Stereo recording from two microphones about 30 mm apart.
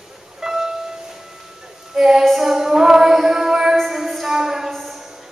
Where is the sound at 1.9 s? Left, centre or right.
Centre.